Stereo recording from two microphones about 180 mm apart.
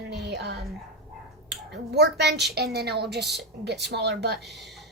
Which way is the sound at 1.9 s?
65° right (ahead or behind).